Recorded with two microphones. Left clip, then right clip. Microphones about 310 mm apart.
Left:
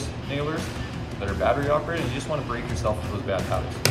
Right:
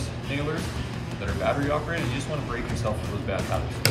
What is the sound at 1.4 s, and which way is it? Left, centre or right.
Speech, centre.